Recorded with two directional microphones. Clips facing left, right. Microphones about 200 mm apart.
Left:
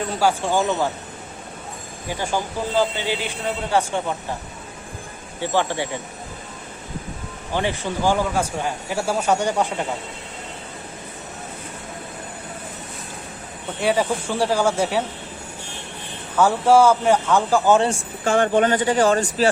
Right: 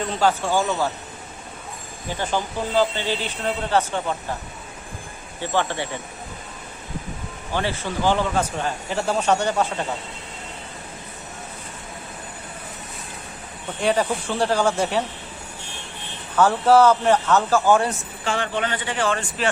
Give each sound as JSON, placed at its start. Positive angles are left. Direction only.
{"t": 0.1, "sound": "speech", "side_deg": 10}
{"t": 2.0, "sound": "speech", "side_deg": 10}
{"t": 5.4, "sound": "speech", "side_deg": 15}
{"t": 7.5, "sound": "speech", "side_deg": 15}
{"t": 13.8, "sound": "speech", "side_deg": 10}
{"t": 16.3, "sound": "speech", "side_deg": 10}
{"t": 18.3, "sound": "speech", "side_deg": 45}